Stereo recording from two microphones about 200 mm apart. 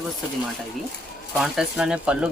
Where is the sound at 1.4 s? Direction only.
5° right (ahead or behind).